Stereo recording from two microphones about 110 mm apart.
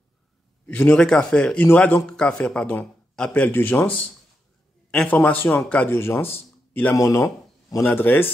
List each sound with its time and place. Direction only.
0.7 s a man's voice: 15° left (ahead or behind)
7.0 s speech: 30° left (ahead or behind)
7.8 s a man's voice: 20° left (ahead or behind)